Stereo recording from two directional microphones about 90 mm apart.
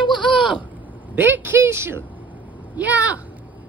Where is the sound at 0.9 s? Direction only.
20° right (ahead or behind).